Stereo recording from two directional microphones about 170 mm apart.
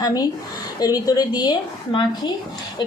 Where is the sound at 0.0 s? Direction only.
20° left (ahead or behind).